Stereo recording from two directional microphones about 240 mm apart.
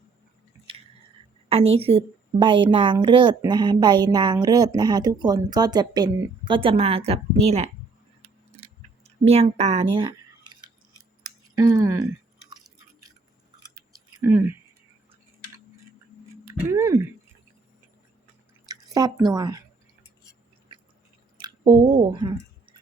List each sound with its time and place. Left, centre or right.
1.5 s a woman's voice: right
8.2 s scissors: right
11.5 s speech: centre
13.7 s a sound: centre
16.5 s speech: centre
18.7 s speech: centre
21.3 s chewing: centre